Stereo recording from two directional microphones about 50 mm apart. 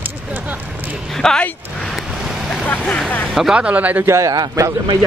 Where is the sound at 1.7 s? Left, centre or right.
Centre.